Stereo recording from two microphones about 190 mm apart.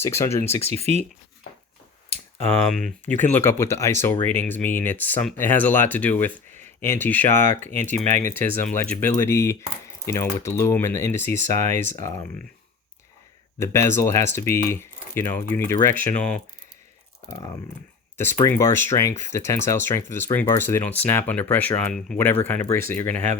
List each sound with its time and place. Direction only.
0.0 s speech: 15° left (ahead or behind)
0.7 s speech: 35° right (ahead or behind)
2.0 s a sound: 35° right (ahead or behind)
3.2 s speech: 10° left (ahead or behind)
13.6 s speech: 15° left (ahead or behind)
18.4 s speech: 15° left (ahead or behind)